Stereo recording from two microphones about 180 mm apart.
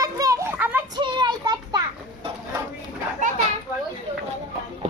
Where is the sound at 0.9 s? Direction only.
25° right (ahead or behind).